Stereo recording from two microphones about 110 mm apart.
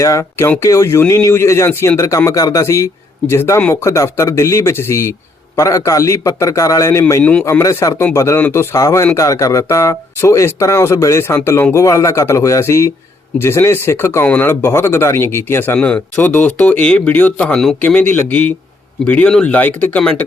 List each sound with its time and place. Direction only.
0.0 s speech: 30° left (ahead or behind)
8.4 s speech: 15° left (ahead or behind)
8.7 s speech: 25° left (ahead or behind)